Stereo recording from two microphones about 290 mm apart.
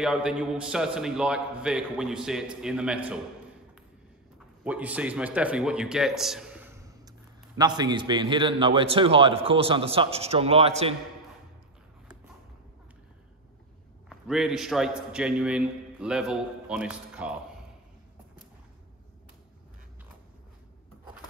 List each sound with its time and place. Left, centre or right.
0.0 s a man's voice: centre
4.6 s a man's voice: centre; by 11.0 s right
14.0 s a man's voice: centre